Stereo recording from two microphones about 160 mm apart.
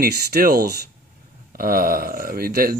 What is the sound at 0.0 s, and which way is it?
Speech, 75° right (ahead or behind).